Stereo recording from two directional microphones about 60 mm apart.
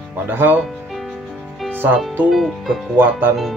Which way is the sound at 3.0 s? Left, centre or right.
Right.